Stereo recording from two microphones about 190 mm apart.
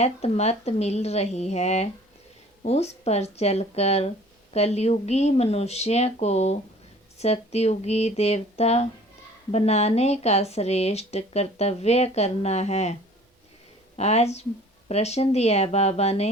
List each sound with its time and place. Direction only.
0.0 s speech: 35° left (ahead or behind)